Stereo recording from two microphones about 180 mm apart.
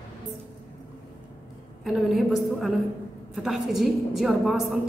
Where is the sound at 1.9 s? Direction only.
Centre (ahead or behind).